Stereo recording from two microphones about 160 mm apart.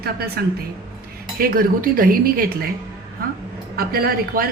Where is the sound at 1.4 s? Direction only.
65° right (ahead or behind).